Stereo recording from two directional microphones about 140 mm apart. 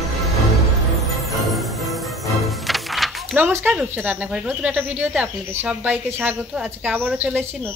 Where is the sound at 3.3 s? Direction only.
15° right (ahead or behind).